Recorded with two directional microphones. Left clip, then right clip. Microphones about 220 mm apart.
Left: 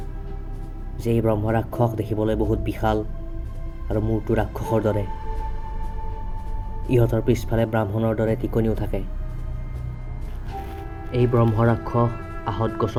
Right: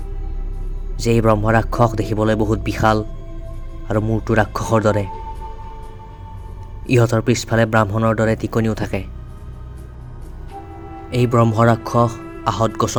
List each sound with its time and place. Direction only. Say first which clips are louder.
1.0 s speech: right 6 dB; 45° right (ahead or behind)
6.8 s speech: right 4 dB; 45° right (ahead or behind)
11.1 s speech: right 4 dB; 55° right (ahead or behind)